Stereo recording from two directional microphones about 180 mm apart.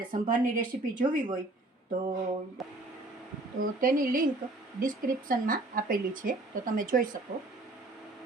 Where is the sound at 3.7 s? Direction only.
50° right (ahead or behind).